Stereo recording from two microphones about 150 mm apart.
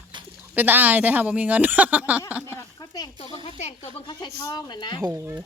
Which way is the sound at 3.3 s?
45° left (ahead or behind).